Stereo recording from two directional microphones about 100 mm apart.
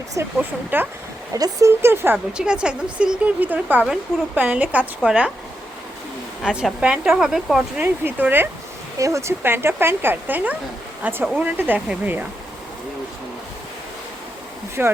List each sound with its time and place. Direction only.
0.2 s speech: 30° right (ahead or behind)
0.7 s speech: 20° right (ahead or behind)
1.3 s speech: 35° right (ahead or behind)
2.1 s speech: 10° right (ahead or behind)
6.4 s speech: 5° right (ahead or behind)
7.8 s speech: 20° right (ahead or behind)
9.0 s speech: 30° right (ahead or behind)
14.8 s speech: 15° right (ahead or behind)